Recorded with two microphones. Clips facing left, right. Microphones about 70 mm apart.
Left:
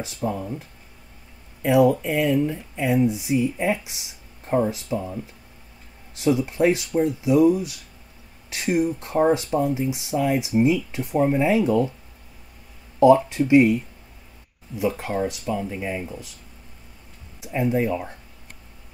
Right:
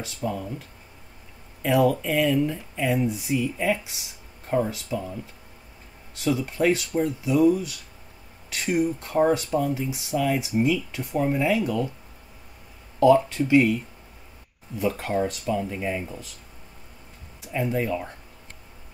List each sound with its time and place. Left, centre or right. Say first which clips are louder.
0.0 s speech: left 2 dB; left
6.1 s speech: left 4 dB; left
13.0 s speech: left 3 dB; left
14.8 s speech: left 1 dB; centre
17.4 s speech: left 4 dB; centre